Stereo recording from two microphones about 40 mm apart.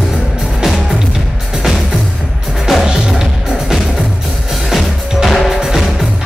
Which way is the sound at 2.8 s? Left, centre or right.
Centre.